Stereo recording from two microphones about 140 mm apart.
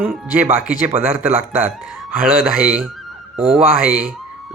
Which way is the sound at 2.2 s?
10° right (ahead or behind).